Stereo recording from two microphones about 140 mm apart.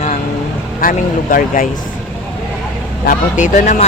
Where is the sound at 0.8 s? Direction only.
80° left.